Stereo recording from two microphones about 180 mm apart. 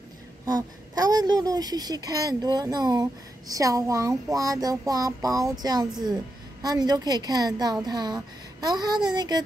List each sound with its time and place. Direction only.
0.5 s a woman's voice: 20° right (ahead or behind)